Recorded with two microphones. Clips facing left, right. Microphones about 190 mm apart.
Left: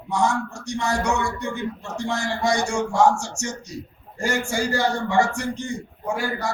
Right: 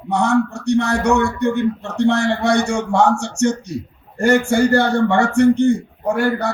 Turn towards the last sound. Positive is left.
turn(degrees=-60)  # may be behind; listen again after turning